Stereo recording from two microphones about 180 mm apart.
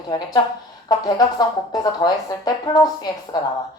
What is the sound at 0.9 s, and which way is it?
Speech, 20° left (ahead or behind).